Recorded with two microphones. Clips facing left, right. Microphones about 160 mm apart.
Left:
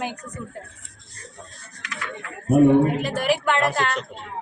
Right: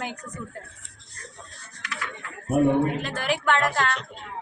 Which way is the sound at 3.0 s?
10° left (ahead or behind).